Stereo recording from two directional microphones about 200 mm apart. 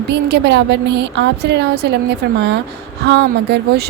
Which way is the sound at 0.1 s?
55° right (ahead or behind).